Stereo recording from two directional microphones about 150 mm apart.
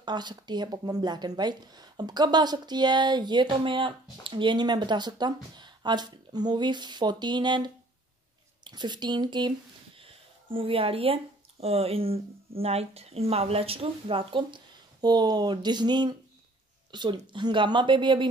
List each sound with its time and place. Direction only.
0.0 s speech: 30° right (ahead or behind)
9.9 s a sound: 35° right (ahead or behind)
11.6 s speech: 40° right (ahead or behind)